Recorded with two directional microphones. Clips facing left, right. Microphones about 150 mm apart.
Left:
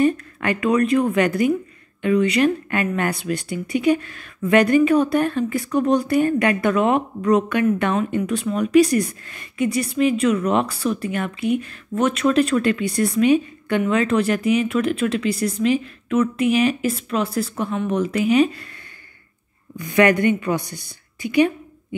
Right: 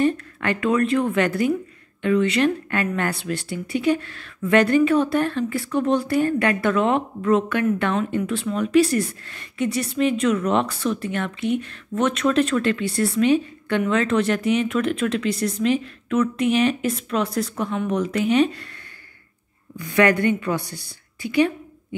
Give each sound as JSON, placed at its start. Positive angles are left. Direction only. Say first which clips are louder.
{"t": 0.0, "sound": "speech", "louder": "left 2 dB", "side_deg": 10}
{"t": 19.8, "sound": "speech", "louder": "left 2 dB", "side_deg": 15}